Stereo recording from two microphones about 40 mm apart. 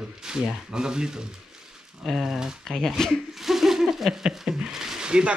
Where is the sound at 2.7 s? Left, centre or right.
Centre.